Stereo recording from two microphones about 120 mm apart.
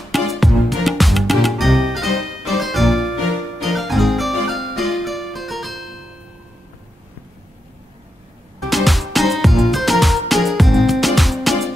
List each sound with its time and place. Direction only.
0.1 s music: centre (ahead or behind)
8.5 s music: centre (ahead or behind)